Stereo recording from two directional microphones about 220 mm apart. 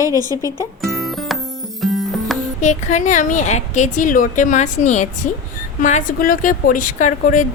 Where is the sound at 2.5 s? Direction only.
35° left (ahead or behind).